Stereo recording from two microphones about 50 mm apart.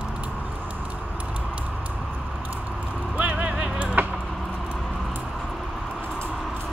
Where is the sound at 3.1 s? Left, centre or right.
Right.